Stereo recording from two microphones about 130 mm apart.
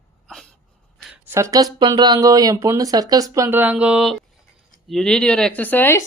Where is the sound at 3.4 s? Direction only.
15° right (ahead or behind).